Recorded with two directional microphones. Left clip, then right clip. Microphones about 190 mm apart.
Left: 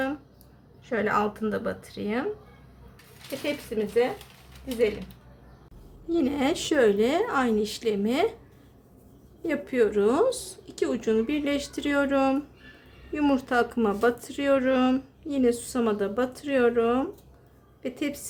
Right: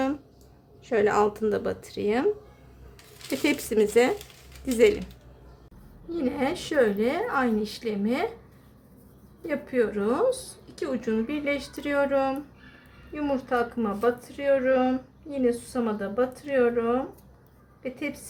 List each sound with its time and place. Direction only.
0.9 s speech: 25° right (ahead or behind)
3.4 s speech: 55° right (ahead or behind)
6.1 s speech: 35° left (ahead or behind)
9.5 s a woman's voice: 35° left (ahead or behind)